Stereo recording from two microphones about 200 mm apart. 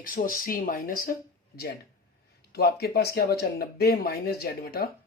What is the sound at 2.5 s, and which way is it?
Speech, 50° left (ahead or behind).